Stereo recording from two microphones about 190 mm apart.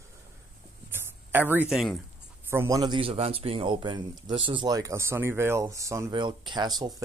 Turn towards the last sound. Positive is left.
turn(degrees=-20)  # may be behind; listen again after turning